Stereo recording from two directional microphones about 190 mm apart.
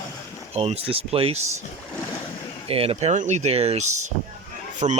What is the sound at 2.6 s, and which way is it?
A man's voice, 30° right (ahead or behind).